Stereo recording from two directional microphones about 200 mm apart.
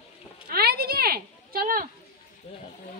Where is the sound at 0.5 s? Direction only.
50° right (ahead or behind).